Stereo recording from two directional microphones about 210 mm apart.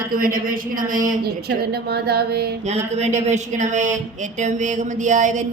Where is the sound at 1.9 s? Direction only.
50° right (ahead or behind).